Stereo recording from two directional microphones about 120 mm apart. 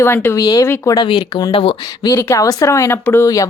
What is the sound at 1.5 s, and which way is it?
Speech, 50° left (ahead or behind).